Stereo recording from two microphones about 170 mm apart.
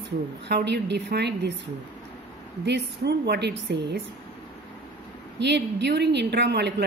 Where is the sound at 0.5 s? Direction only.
75° right (ahead or behind).